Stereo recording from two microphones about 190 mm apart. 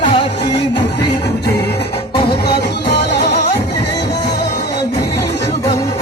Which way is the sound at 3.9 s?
20° left (ahead or behind).